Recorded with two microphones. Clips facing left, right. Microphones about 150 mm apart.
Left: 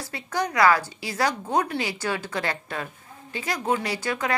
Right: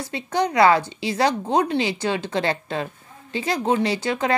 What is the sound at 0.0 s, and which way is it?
Speech, 20° right (ahead or behind).